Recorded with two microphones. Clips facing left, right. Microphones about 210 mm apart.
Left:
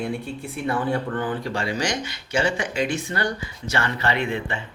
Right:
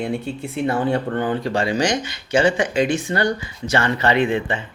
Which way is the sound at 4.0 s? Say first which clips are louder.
Right 6 dB; 20° right (ahead or behind).